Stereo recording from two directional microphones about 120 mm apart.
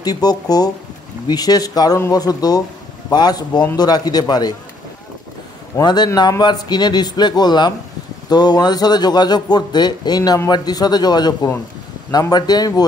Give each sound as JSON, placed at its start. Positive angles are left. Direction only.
{"t": 0.0, "sound": "speech", "side_deg": 35}
{"t": 5.8, "sound": "speech", "side_deg": 35}